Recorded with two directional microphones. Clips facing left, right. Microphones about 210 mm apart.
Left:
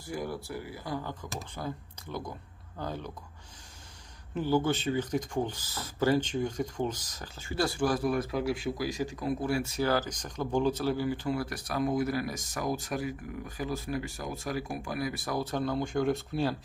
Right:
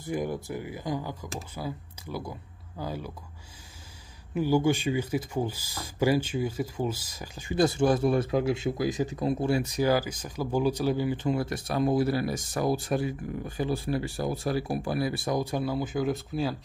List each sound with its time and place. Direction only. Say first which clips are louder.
0.0 s speech: right 5 dB; 20° right (ahead or behind)
4.3 s speech: right 3 dB; 10° right (ahead or behind); by 15.3 s 30° right (ahead or behind)
15.3 s speech: even; 10° right (ahead or behind)